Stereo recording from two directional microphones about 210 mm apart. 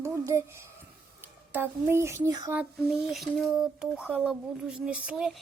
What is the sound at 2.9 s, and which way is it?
Speech, centre (ahead or behind).